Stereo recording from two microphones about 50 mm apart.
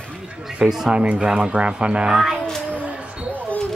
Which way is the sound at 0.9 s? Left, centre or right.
Right.